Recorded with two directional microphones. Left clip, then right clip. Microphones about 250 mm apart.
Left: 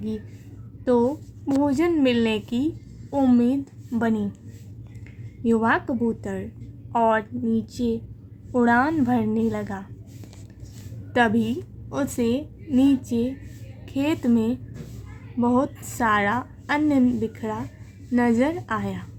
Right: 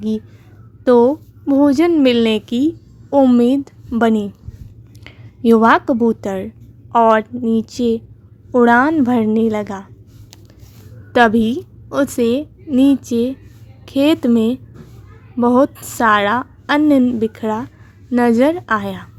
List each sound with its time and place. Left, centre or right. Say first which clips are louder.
0.9 s a woman's voice: right 10 dB; right
11.1 s a woman's voice: right 9 dB; right